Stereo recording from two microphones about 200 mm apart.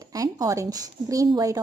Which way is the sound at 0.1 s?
15° right (ahead or behind).